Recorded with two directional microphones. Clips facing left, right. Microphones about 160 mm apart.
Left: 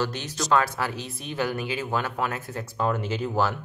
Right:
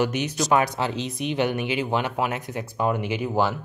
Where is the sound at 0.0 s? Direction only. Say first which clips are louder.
Right 5 dB; 15° right (ahead or behind).